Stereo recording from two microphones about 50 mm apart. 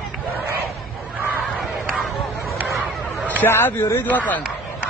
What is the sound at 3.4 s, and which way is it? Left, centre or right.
Speech, left.